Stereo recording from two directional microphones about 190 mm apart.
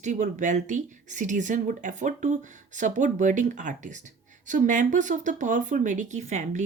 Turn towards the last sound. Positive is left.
turn(degrees=-40)  # may be behind; listen again after turning